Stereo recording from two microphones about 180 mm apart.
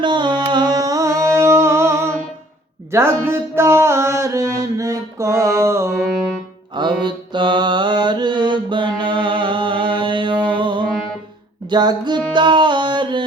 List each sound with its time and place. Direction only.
0.0 s a sound: 25° right (ahead or behind)
2.9 s mantra: 15° right (ahead or behind)
7.0 s mantra: 25° right (ahead or behind)
11.7 s music: 25° right (ahead or behind)